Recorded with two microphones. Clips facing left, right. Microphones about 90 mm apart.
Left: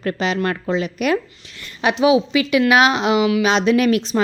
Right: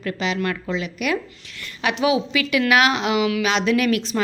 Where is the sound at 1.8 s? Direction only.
25° left (ahead or behind).